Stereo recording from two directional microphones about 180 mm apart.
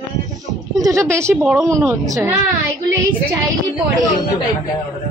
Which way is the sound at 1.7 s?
15° right (ahead or behind).